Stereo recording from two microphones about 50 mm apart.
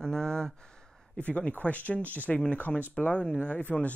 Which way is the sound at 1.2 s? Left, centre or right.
Left.